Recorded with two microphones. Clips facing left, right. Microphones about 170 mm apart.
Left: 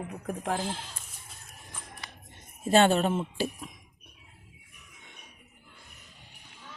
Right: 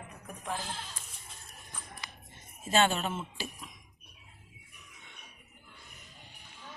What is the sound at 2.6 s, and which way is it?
A woman's voice, 55° left (ahead or behind).